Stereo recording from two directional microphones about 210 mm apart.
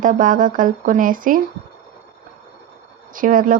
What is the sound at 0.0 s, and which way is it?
Speech, 40° right (ahead or behind).